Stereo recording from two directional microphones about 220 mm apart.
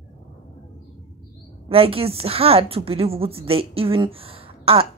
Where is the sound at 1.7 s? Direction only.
25° right (ahead or behind).